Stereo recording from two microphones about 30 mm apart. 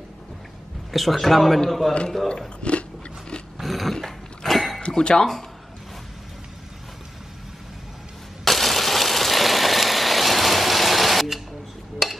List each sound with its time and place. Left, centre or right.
0.9 s a man's voice: centre
2.6 s biting: left
3.6 s dog: centre
4.5 s a sound: centre
4.9 s speech: left
8.5 s engine: centre
12.0 s a sound: centre